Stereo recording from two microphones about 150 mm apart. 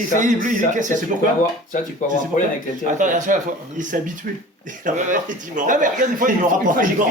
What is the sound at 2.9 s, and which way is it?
Speech, 55° right (ahead or behind).